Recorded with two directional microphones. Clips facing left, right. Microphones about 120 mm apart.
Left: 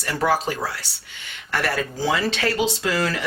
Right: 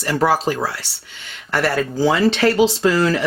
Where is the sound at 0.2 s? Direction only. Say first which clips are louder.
Right 3 dB; 35° right (ahead or behind).